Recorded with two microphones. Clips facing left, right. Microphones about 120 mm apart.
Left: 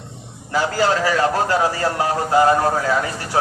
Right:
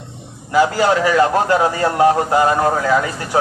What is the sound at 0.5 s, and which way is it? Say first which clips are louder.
A man's voice: right 4 dB; 20° right (ahead or behind).